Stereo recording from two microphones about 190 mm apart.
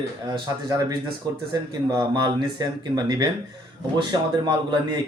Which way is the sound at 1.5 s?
20° right (ahead or behind).